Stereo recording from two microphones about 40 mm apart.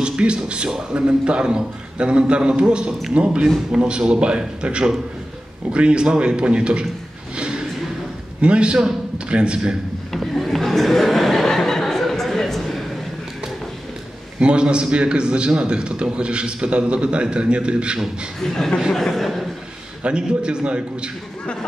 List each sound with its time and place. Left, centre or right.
0.0 s a man's voice: right
7.3 s a sound: right
8.4 s a man's voice: right
10.3 s chuckle: centre
14.4 s a man's voice: right
18.4 s speech: centre
20.0 s a man's voice: right